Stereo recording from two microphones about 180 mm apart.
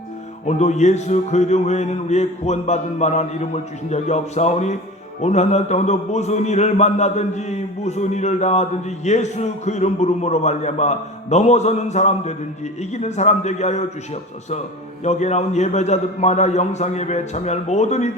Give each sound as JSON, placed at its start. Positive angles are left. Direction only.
{"t": 0.4, "sound": "speech", "side_deg": 40}
{"t": 15.0, "sound": "speech", "side_deg": 40}